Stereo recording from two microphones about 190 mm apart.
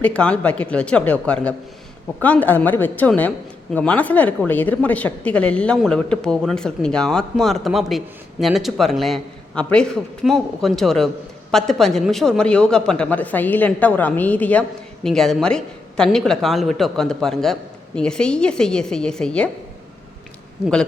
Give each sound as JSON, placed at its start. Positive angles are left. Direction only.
{"t": 0.0, "sound": "a man's voice", "side_deg": 5}